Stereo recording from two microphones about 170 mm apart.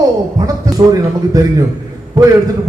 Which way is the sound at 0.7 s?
20° right (ahead or behind).